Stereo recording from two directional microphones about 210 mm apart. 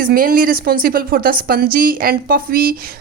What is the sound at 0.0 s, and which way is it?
A woman's voice, 45° right (ahead or behind).